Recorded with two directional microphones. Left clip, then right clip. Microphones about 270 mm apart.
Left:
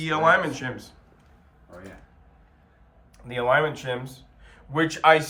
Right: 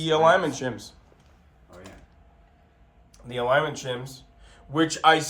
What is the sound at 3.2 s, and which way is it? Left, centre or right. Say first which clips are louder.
Speech: left 1 dB; centre.